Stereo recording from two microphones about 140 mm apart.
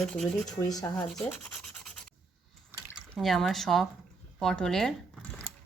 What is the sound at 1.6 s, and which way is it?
Rub, 5° left (ahead or behind).